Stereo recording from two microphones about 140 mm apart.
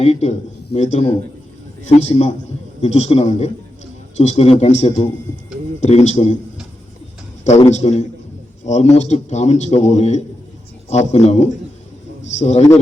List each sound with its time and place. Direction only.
0.0 s a man's voice: 50° left (ahead or behind)
7.7 s a man's voice: 55° left (ahead or behind)